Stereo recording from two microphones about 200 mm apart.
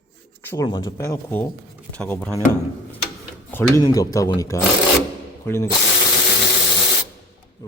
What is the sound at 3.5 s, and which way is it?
Speech, 10° left (ahead or behind).